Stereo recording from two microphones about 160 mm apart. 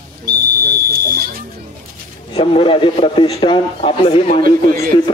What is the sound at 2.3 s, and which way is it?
A man's voice, 35° left (ahead or behind).